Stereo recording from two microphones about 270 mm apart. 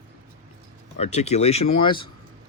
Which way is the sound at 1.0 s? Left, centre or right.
Left.